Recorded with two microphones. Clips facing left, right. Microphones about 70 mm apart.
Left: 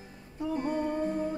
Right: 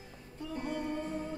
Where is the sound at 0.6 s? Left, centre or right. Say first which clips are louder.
Left 5 dB; left.